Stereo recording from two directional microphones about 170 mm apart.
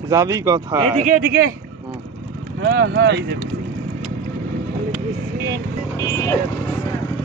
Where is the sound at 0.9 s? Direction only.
45° right (ahead or behind).